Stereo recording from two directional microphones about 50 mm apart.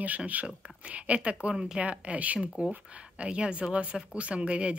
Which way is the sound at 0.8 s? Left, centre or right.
Right.